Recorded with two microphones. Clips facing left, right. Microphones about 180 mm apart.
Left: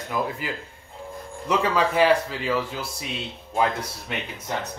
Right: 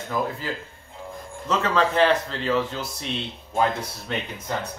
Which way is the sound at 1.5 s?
10° left (ahead or behind).